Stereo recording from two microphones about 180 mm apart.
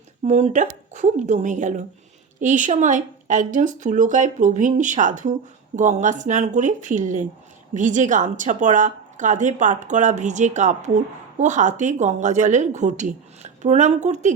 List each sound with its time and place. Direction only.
0.3 s a woman's voice: 40° right (ahead or behind)